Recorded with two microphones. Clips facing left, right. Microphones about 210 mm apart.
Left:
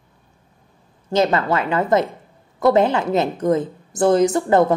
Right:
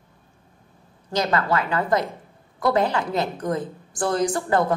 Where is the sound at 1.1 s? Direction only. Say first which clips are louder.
Left 5 dB; 25° left (ahead or behind).